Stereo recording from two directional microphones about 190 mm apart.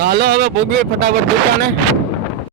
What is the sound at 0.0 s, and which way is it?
Speech, 55° right (ahead or behind).